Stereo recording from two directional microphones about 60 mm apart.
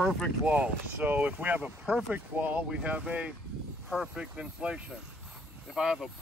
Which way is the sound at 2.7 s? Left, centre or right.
Centre.